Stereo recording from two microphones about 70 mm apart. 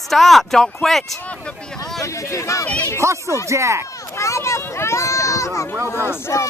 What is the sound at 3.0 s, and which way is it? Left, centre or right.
Speech, right.